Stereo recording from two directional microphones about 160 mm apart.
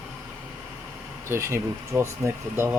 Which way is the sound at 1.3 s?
15° right (ahead or behind).